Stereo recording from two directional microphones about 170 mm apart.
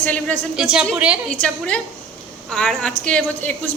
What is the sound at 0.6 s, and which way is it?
A woman's voice, 5° right (ahead or behind).